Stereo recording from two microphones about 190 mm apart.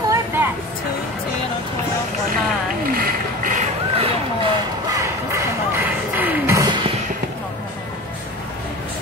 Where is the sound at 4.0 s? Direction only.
30° right (ahead or behind).